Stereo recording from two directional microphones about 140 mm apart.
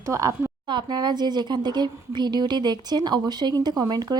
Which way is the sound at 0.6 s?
35° right (ahead or behind).